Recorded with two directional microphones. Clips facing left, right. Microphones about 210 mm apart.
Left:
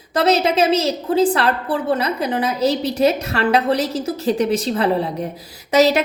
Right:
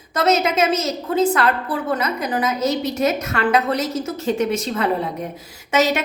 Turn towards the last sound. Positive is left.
turn(degrees=35)  # may be behind; listen again after turning